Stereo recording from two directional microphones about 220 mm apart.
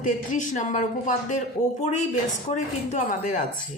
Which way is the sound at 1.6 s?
15° left (ahead or behind).